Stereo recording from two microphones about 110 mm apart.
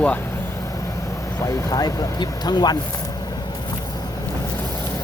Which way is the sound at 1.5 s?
35° left (ahead or behind).